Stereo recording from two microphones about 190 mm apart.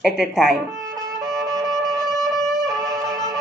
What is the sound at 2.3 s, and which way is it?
Music, 15° right (ahead or behind).